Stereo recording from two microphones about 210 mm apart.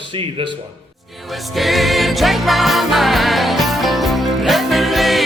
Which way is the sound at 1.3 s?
Centre (ahead or behind).